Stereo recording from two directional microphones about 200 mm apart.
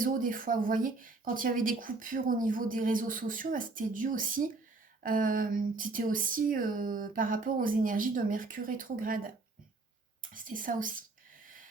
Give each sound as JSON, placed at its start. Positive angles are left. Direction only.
{"t": 0.0, "sound": "speech", "side_deg": -45}